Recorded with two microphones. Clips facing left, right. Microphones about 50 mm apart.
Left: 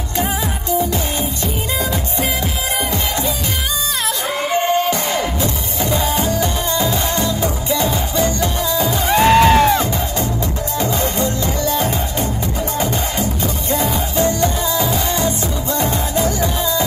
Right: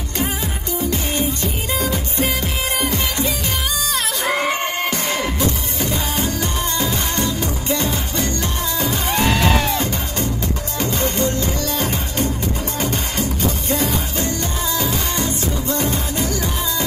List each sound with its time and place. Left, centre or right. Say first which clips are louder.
2.8 s music: left 1 dB; left
5.8 s music: left 7 dB; left
12.8 s music: even; left